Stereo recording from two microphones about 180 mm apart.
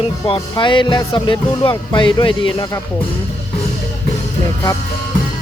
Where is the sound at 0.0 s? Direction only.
30° left (ahead or behind).